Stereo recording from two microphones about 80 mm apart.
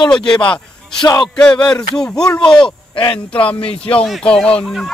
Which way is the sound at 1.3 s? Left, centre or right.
Centre.